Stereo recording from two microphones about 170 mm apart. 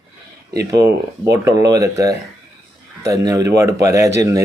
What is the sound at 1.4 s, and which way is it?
Speech, 20° right (ahead or behind).